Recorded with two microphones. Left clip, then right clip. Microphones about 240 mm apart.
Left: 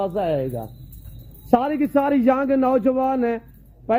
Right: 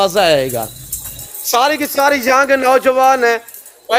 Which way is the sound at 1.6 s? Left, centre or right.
Centre.